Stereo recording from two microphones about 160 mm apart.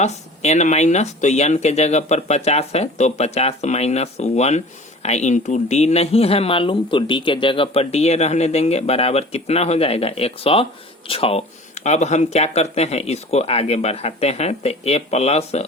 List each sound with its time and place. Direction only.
0.0 s speech: 45° left (ahead or behind)